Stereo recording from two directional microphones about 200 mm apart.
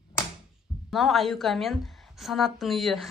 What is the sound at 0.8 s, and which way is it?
A woman's voice, centre (ahead or behind).